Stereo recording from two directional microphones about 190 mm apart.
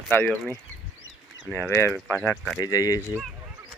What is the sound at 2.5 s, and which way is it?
Speech, 20° left (ahead or behind).